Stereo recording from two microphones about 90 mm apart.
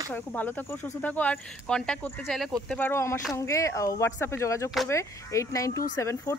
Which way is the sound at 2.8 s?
30° left (ahead or behind).